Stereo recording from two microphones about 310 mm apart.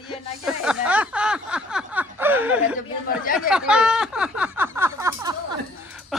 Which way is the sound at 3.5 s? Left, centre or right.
Centre.